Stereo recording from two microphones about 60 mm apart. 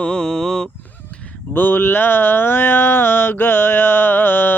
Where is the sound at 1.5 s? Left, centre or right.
Left.